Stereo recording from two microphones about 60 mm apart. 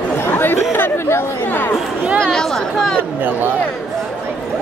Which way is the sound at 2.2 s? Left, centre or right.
Centre.